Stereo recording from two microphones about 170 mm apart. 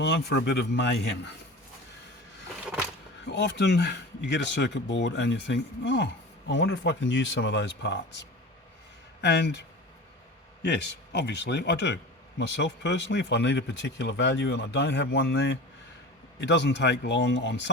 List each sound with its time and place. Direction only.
0.0 s speech: 90° left
3.2 s speech: 90° left
9.2 s a man's voice: 90° left